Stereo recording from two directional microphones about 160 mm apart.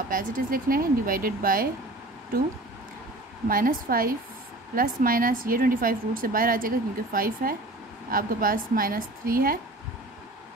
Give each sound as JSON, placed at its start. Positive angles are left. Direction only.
{"t": 0.1, "sound": "a woman's voice", "side_deg": -60}
{"t": 3.4, "sound": "a woman's voice", "side_deg": -60}